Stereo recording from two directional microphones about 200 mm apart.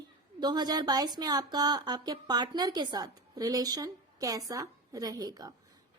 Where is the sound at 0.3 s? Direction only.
20° right (ahead or behind).